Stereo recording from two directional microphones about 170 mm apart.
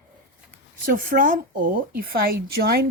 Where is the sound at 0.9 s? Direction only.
55° right (ahead or behind).